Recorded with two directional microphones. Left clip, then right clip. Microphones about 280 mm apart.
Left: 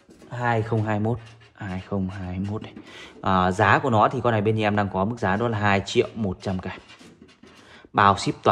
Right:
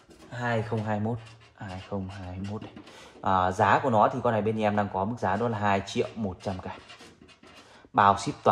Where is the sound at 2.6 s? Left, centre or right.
Left.